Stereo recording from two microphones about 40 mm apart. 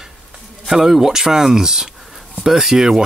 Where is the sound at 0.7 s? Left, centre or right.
Centre.